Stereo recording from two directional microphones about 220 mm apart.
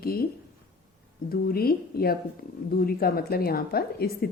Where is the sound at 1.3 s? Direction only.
45° left (ahead or behind).